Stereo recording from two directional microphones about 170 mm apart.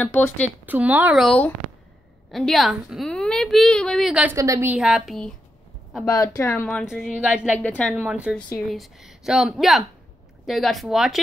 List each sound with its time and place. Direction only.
0.0 s speech: 10° left (ahead or behind)
0.7 s speech: 10° right (ahead or behind)
1.2 s a woman's voice: 5° left (ahead or behind)
4.4 s speech: 15° right (ahead or behind)
4.7 s a woman's voice: centre (ahead or behind)
6.0 s a woman's voice: 20° left (ahead or behind); by 7.6 s 5° right (ahead or behind)
7.6 s speech: 10° left (ahead or behind)
7.9 s a woman's voice: 5° right (ahead or behind)